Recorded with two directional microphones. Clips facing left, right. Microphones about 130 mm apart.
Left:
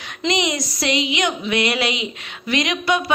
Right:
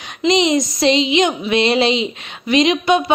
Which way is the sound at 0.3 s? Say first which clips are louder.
Right 7 dB; 20° right (ahead or behind).